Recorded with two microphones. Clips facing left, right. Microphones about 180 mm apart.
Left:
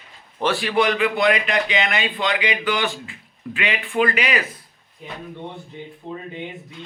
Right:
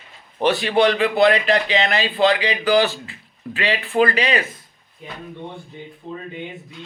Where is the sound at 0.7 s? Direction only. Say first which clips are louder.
Right 2 dB; 30° right (ahead or behind).